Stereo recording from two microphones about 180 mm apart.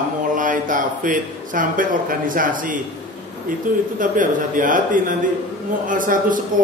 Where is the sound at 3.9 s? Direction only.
45° right (ahead or behind).